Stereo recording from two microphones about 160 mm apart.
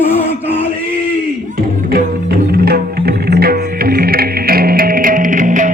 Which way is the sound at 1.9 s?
75° right (ahead or behind).